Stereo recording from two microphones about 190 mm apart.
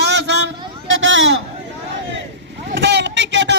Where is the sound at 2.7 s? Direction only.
70° right (ahead or behind).